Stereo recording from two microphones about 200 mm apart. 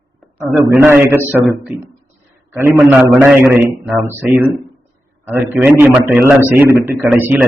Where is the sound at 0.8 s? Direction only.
10° right (ahead or behind).